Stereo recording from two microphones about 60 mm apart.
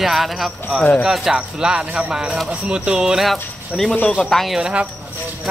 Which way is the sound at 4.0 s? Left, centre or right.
Left.